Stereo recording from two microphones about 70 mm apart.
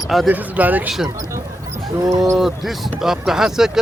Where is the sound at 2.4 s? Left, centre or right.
Centre.